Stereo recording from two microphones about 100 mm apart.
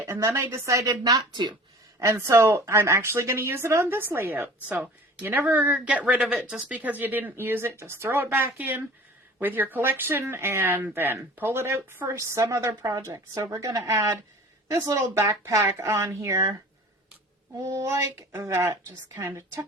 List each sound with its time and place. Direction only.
0.0 s a woman's voice: 30° right (ahead or behind)
1.1 s speech: 50° right (ahead or behind)
2.0 s a woman's voice: 30° right (ahead or behind)
17.6 s a woman's voice: 30° right (ahead or behind)